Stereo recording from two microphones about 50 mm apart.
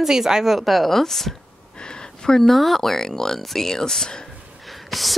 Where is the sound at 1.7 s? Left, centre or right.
Centre.